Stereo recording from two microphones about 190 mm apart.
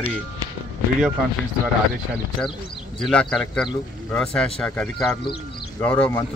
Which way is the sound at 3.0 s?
5° left (ahead or behind).